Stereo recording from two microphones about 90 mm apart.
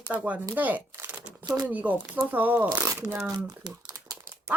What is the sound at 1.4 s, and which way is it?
Speech, 50° right (ahead or behind).